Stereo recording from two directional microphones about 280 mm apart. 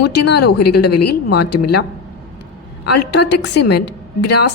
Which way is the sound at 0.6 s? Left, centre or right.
Left.